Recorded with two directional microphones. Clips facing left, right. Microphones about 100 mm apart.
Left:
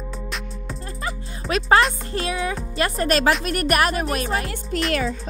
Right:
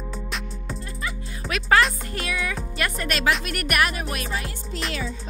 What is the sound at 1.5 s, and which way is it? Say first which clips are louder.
Speech: left 3 dB; 35° left (ahead or behind).